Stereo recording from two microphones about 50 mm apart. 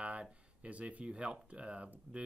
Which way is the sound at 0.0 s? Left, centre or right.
Right.